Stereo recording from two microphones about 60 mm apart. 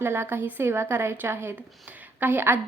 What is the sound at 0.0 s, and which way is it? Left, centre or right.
A woman's voice, right.